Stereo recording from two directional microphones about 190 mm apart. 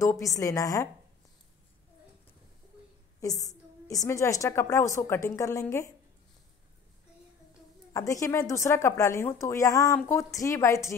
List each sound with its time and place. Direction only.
0.0 s a woman's voice: 15° left (ahead or behind)
3.2 s a woman's voice: 20° left (ahead or behind)
7.9 s a woman's voice: 15° left (ahead or behind)